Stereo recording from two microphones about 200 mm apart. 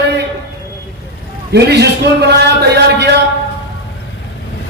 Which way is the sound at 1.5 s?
55° right (ahead or behind).